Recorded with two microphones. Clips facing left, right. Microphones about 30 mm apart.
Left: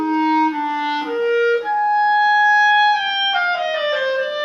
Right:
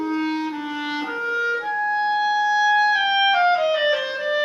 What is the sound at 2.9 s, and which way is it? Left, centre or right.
Clarinet, centre.